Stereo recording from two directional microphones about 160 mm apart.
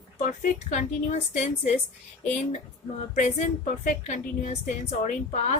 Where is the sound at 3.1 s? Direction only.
55° left (ahead or behind).